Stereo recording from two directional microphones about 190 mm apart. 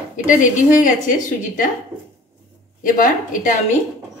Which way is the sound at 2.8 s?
45° left (ahead or behind).